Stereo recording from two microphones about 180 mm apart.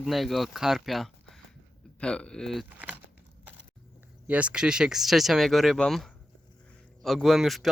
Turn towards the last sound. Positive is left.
turn(degrees=0)  # may be behind; listen again after turning